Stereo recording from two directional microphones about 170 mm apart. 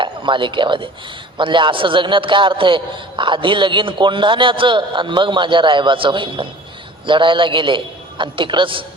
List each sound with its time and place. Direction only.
0.0 s a man's voice: 30° right (ahead or behind)